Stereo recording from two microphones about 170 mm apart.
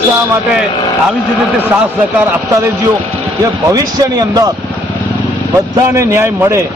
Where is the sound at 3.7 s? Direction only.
20° right (ahead or behind).